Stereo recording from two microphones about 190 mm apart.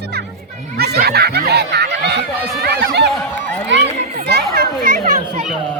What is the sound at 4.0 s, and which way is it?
Children playing, 35° right (ahead or behind).